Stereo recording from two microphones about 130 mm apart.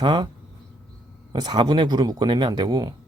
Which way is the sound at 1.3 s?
35° right (ahead or behind).